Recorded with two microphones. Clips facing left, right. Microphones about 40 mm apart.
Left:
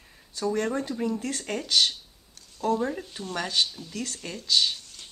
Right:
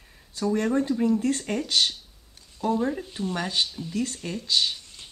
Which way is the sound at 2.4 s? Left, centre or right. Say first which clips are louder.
Even; centre.